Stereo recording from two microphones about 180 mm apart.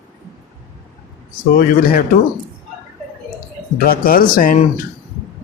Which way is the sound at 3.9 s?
55° left (ahead or behind).